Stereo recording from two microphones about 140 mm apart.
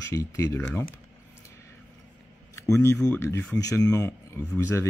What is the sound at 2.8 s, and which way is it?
Speech, 20° left (ahead or behind).